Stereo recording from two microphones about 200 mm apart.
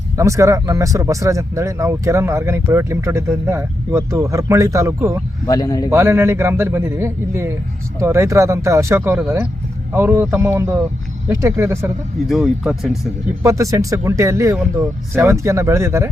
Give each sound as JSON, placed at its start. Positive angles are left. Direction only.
{"t": 0.2, "sound": "speech", "side_deg": -15}
{"t": 5.5, "sound": "speech", "side_deg": 20}
{"t": 5.9, "sound": "speech", "side_deg": -10}
{"t": 12.3, "sound": "speech", "side_deg": 0}
{"t": 13.4, "sound": "speech", "side_deg": -15}